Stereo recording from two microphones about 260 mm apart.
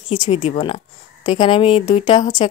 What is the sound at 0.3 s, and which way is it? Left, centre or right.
Speech, left.